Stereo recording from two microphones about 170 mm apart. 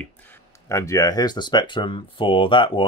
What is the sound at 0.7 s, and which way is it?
Speech, 15° left (ahead or behind).